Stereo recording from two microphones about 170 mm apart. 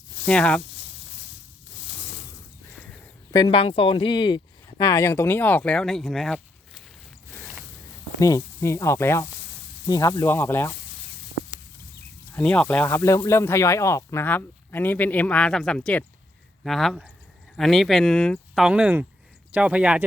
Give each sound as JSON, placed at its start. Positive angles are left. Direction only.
{"t": 0.3, "sound": "speech", "side_deg": 5}
{"t": 3.3, "sound": "speech", "side_deg": 30}
{"t": 8.2, "sound": "speech", "side_deg": 20}
{"t": 12.3, "sound": "speech", "side_deg": 10}